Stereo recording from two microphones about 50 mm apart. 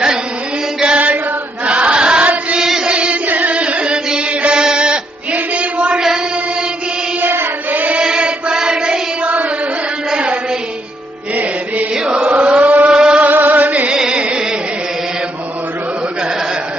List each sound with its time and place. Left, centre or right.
0.9 s chant: right
2.2 s chant: right
2.6 s chant: centre
3.2 s music: right
7.2 s child singing: right
7.9 s music: centre
10.1 s a sound: right
11.9 s mantra: centre
12.2 s chant: right
12.9 s music: centre
13.2 s music: right
13.9 s music: centre